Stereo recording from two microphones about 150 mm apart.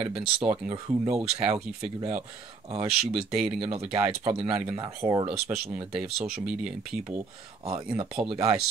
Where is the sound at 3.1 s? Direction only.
5° right (ahead or behind).